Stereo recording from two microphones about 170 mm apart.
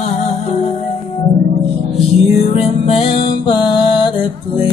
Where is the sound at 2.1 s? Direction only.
35° left (ahead or behind).